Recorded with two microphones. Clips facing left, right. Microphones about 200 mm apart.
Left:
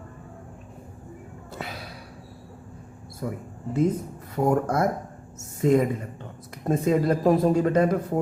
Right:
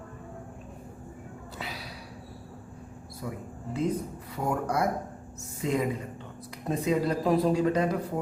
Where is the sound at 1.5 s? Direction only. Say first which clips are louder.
Left 4 dB; 50° left (ahead or behind).